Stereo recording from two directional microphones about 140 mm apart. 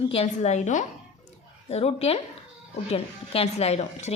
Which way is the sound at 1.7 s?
50° left (ahead or behind).